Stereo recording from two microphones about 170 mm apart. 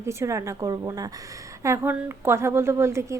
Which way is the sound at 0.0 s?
15° right (ahead or behind).